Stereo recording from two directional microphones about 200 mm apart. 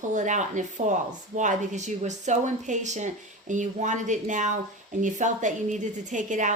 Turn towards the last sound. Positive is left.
turn(degrees=-40)  # may be behind; listen again after turning